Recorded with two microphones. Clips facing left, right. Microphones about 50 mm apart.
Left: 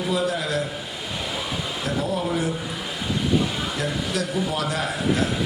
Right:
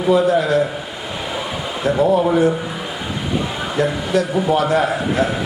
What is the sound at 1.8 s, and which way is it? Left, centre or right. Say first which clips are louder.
Speech: right 12 dB; centre.